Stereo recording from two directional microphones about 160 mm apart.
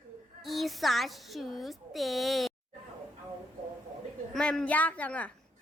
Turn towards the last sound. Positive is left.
turn(degrees=10)  # may be behind; listen again after turning